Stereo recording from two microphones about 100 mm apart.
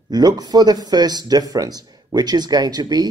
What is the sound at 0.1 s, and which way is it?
Speech, 40° right (ahead or behind).